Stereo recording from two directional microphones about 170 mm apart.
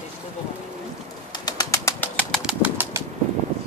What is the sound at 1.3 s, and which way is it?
Bird, 25° left (ahead or behind).